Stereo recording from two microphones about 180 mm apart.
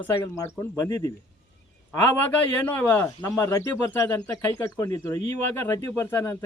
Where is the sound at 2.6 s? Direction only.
10° left (ahead or behind).